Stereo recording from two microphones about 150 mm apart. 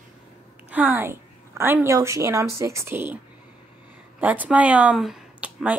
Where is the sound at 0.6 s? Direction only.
10° right (ahead or behind).